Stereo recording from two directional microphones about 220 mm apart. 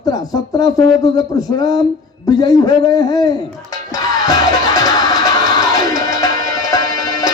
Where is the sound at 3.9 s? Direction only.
15° left (ahead or behind).